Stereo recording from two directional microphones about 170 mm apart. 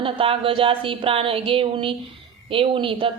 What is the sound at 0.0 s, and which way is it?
A woman's voice, 30° right (ahead or behind).